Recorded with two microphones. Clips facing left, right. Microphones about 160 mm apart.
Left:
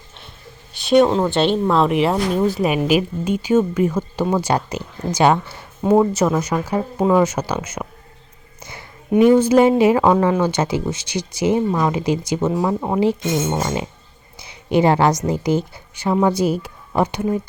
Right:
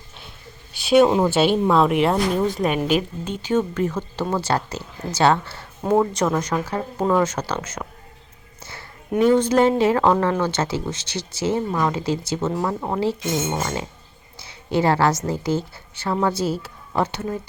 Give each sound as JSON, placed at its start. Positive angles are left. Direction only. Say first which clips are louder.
{"t": 0.7, "sound": "speech", "louder": "left 1 dB", "side_deg": -5}